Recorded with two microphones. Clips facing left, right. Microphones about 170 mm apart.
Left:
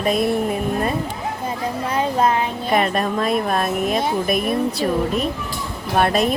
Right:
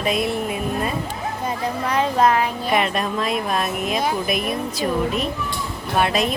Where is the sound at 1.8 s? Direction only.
30° left (ahead or behind).